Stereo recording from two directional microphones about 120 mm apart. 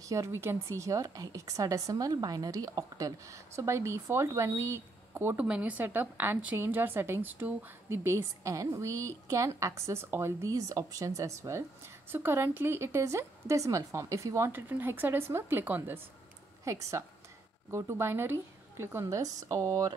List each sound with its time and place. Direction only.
0.0 s a woman's voice: 25° right (ahead or behind)